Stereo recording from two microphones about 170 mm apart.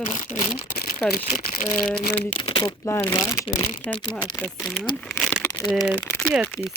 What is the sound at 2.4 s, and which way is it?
Speech, 30° left (ahead or behind).